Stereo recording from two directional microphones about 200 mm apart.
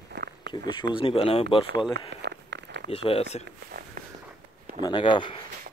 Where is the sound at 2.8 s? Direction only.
30° left (ahead or behind).